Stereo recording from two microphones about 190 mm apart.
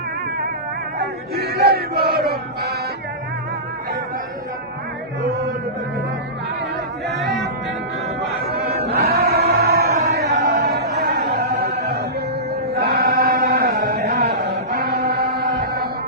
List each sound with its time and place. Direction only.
0.9 s chant: 55° right (ahead or behind)
8.4 s a sound: 55° right (ahead or behind)
9.0 s music: 55° right (ahead or behind)
10.1 s chant: 60° right (ahead or behind)